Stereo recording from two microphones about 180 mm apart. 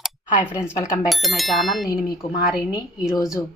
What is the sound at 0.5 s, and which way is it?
Speech, 15° left (ahead or behind).